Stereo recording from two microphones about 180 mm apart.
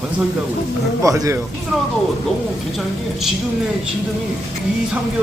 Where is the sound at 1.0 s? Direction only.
20° right (ahead or behind).